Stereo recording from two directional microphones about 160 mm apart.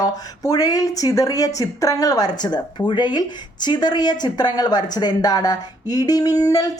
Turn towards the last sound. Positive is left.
turn(degrees=20)  # may be behind; listen again after turning